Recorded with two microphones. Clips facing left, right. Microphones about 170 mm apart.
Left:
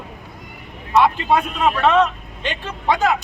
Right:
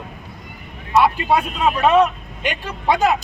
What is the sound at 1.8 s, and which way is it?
Speech, 10° right (ahead or behind).